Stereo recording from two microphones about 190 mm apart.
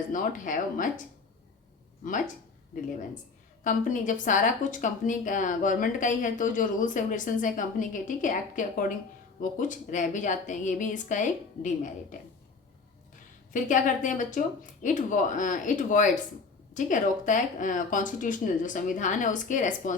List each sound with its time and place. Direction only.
0.1 s a woman's voice: 45° left (ahead or behind)
3.6 s a woman's voice: 45° left (ahead or behind)
13.5 s a woman's voice: 45° left (ahead or behind)